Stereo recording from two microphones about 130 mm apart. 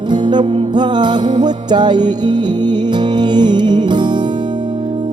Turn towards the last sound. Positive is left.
turn(degrees=-35)  # may be behind; listen again after turning